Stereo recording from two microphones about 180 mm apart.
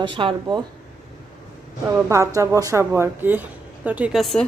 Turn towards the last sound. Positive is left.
turn(degrees=0)  # may be behind; listen again after turning